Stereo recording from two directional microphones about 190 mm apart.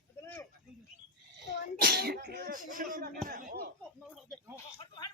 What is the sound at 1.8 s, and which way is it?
Speech, 55° right (ahead or behind).